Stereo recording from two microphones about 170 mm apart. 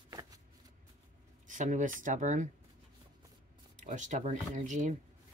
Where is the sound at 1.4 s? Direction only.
50° right (ahead or behind).